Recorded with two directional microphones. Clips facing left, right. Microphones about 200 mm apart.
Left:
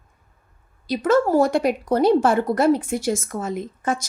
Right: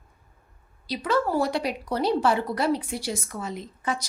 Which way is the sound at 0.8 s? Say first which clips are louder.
Left 7 dB; 50° left (ahead or behind).